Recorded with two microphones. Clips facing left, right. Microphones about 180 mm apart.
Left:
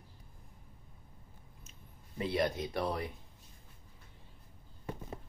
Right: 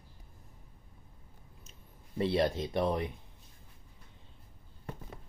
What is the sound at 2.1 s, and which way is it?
Speech, 30° right (ahead or behind).